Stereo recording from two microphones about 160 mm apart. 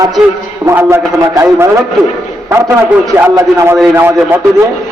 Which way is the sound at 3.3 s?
20° right (ahead or behind).